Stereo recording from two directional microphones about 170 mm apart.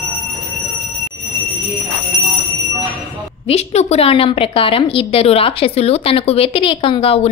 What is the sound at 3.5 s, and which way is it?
A woman's voice, 40° left (ahead or behind).